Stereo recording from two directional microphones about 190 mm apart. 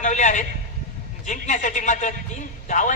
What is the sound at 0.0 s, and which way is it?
A man's voice, 40° left (ahead or behind).